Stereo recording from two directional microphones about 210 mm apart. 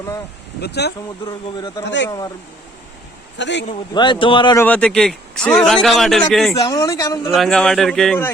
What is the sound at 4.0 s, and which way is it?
Speech, 25° left (ahead or behind).